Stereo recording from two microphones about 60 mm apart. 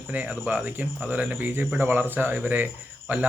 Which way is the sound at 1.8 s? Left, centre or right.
Right.